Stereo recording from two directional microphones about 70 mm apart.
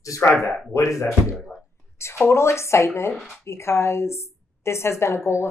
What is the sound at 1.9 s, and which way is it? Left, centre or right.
A woman's voice, left.